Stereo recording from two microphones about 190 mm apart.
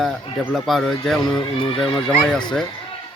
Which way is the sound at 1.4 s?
30° left (ahead or behind).